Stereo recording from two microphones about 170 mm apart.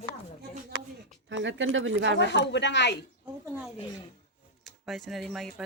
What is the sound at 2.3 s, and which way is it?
Speech, 90° left.